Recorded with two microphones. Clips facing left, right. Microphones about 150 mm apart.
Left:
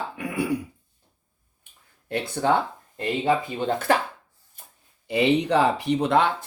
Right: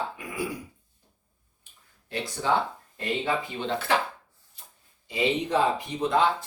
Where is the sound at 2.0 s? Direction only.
55° left (ahead or behind).